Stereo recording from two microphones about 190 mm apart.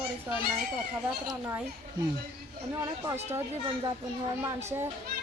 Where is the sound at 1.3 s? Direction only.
10° right (ahead or behind).